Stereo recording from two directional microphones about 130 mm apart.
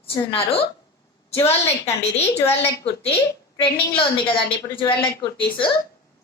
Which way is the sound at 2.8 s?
45° left (ahead or behind).